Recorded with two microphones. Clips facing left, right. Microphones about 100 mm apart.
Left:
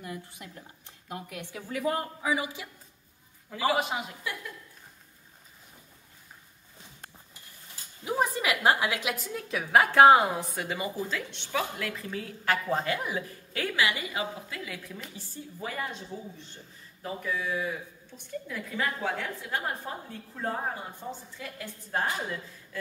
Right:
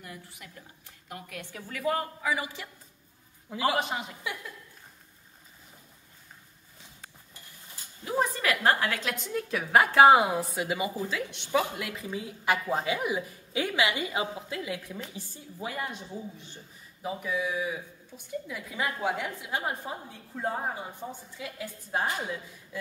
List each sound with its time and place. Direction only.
0.0 s speech: 15° left (ahead or behind)
3.4 s a man's voice: 15° right (ahead or behind)
3.7 s a woman's voice: 5° left (ahead or behind)
8.0 s a woman's voice: 15° left (ahead or behind); by 22.8 s 15° right (ahead or behind)